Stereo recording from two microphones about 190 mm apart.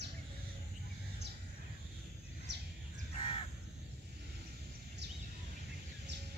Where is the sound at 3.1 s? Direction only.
30° left (ahead or behind).